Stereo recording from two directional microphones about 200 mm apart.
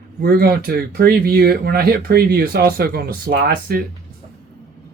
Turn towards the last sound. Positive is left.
turn(degrees=-50)  # may be behind; listen again after turning